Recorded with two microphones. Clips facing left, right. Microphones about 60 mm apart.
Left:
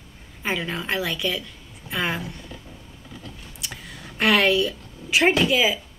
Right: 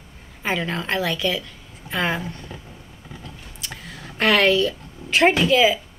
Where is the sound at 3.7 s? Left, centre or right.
Centre.